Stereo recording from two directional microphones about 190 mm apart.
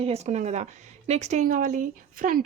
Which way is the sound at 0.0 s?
35° right (ahead or behind).